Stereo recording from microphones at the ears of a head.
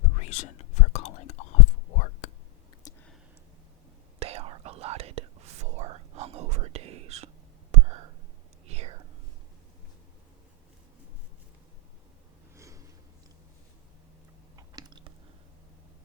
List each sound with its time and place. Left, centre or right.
0.0 s whispering: left
4.2 s whispering: right
7.7 s a sound: right
8.6 s whispering: right